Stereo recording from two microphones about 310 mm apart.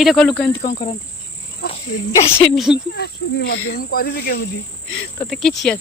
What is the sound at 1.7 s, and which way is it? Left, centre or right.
Speech, centre.